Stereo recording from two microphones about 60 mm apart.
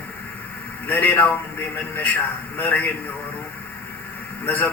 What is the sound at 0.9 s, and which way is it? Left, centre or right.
Speech, left.